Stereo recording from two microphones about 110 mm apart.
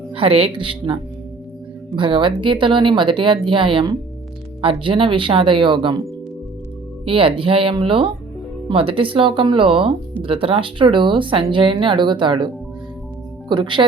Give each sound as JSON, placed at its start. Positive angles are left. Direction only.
{"t": 0.1, "sound": "speech", "side_deg": -60}
{"t": 2.0, "sound": "speech", "side_deg": -50}
{"t": 7.0, "sound": "speech", "side_deg": -55}
{"t": 13.5, "sound": "speech", "side_deg": -45}